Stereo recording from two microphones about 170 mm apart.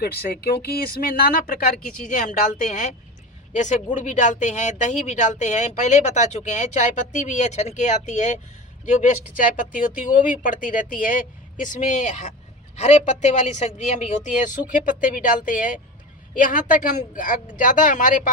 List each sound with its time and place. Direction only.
0.0 s speech: 65° left (ahead or behind); by 2.3 s 50° left (ahead or behind)
3.5 s speech: 45° left (ahead or behind)